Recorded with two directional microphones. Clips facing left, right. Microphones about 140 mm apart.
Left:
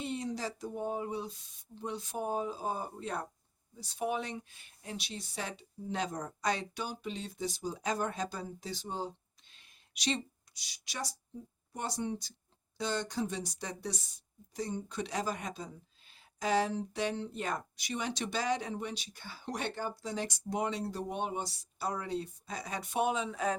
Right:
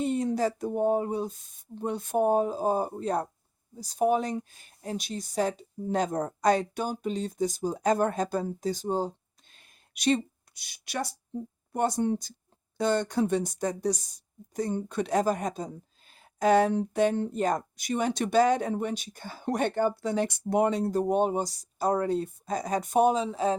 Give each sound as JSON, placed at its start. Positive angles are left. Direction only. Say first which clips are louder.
{"t": 0.0, "sound": "speech", "louder": "right 10 dB", "side_deg": -50}